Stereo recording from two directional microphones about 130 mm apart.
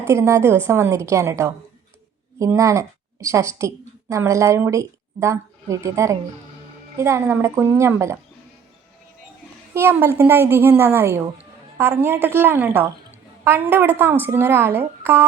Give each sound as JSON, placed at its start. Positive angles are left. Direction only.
{"t": 0.0, "sound": "a woman's voice", "side_deg": -20}
{"t": 9.7, "sound": "a woman's voice", "side_deg": -15}